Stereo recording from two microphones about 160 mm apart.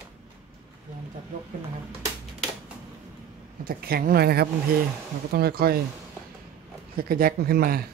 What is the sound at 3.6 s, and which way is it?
A woman's voice, 65° right (ahead or behind).